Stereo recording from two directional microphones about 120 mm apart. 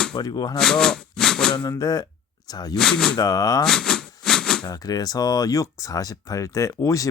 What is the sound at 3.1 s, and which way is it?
Speech, 30° left (ahead or behind).